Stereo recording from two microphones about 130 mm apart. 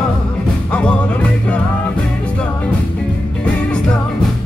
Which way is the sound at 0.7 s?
10° left (ahead or behind).